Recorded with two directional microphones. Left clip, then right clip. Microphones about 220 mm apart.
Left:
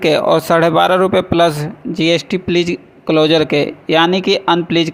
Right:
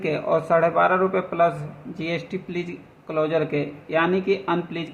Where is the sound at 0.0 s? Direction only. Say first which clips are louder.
Left 10 dB; 40° left (ahead or behind).